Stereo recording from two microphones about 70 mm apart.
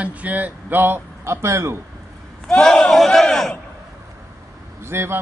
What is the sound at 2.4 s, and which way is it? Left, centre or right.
Battle cry, centre.